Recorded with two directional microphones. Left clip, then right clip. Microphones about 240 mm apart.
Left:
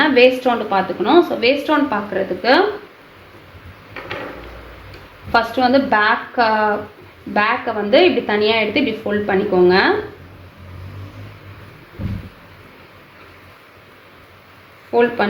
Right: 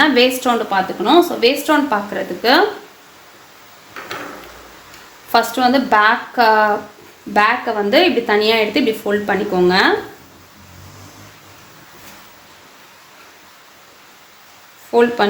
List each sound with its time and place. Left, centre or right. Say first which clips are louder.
0.0 s a woman's voice: left 1 dB; right
5.3 s a woman's voice: right 1 dB; right
14.8 s speech: right 2 dB; right